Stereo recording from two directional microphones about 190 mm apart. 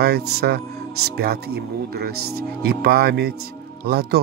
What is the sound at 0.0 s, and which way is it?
Speech, 55° right (ahead or behind).